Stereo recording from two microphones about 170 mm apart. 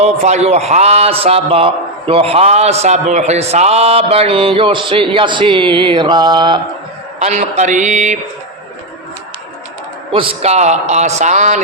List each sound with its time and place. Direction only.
0.0 s a man's voice: 40° right (ahead or behind); by 6.6 s 25° right (ahead or behind)
7.2 s a sound: 40° right (ahead or behind)
10.1 s a man's voice: 35° right (ahead or behind)